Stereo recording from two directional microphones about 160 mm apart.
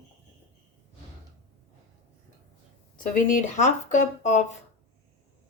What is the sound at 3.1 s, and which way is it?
Speech, 50° left (ahead or behind).